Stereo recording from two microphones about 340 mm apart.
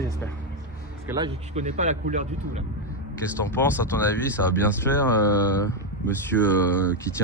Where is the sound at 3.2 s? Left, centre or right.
Centre.